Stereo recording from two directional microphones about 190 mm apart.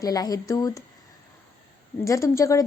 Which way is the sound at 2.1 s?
15° left (ahead or behind).